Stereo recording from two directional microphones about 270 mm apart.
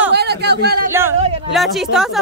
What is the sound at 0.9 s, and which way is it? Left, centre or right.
A woman's voice, centre.